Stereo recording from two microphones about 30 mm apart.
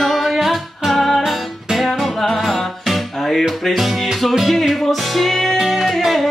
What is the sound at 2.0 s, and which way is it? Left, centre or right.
Music, centre.